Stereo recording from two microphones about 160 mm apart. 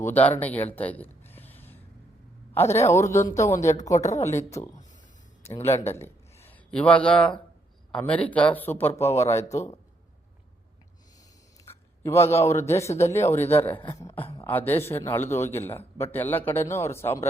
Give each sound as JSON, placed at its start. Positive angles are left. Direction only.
{"t": 0.0, "sound": "a man's voice", "side_deg": 10}
{"t": 0.8, "sound": "a sound", "side_deg": 10}
{"t": 2.6, "sound": "a man's voice", "side_deg": 15}
{"t": 3.9, "sound": "speech", "side_deg": 45}
{"t": 4.2, "sound": "a man's voice", "side_deg": 20}
{"t": 6.0, "sound": "a sound", "side_deg": 15}
{"t": 6.7, "sound": "a man's voice", "side_deg": 10}
{"t": 9.4, "sound": "speech", "side_deg": 45}
{"t": 11.7, "sound": "a man's voice", "side_deg": 15}